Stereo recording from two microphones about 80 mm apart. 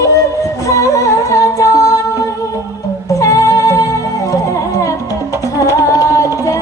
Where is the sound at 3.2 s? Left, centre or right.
Left.